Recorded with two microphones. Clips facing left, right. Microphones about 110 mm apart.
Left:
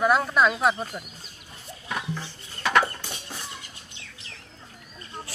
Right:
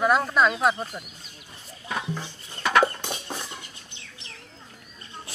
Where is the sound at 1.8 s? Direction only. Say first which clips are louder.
Right 1 dB; 20° right (ahead or behind).